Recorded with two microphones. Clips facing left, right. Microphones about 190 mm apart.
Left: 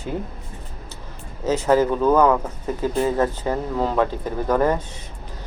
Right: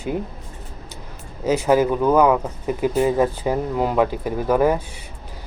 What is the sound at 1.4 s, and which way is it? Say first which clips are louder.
Speech: right 1 dB; 10° right (ahead or behind).